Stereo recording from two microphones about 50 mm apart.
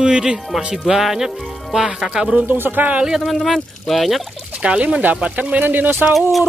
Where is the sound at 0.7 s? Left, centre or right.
Centre.